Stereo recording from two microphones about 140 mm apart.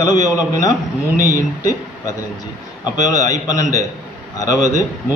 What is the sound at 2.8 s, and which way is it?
Speech, 25° left (ahead or behind).